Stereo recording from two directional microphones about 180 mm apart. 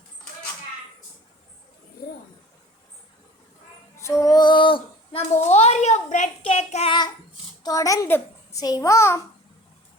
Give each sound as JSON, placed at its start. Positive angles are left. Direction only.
{"t": 4.0, "sound": "female singing", "side_deg": 15}
{"t": 7.6, "sound": "a child's voice", "side_deg": 20}